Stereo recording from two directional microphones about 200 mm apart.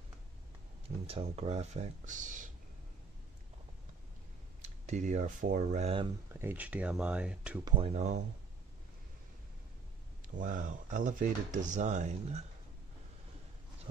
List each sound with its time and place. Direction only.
0.8 s speech: 30° right (ahead or behind)
4.6 s speech: 35° right (ahead or behind)
6.4 s speech: 5° right (ahead or behind)
7.6 s speech: 25° right (ahead or behind)
10.3 s speech: 40° right (ahead or behind)